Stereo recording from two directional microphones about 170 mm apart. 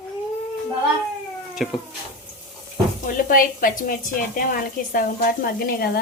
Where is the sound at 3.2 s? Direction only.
55° left (ahead or behind).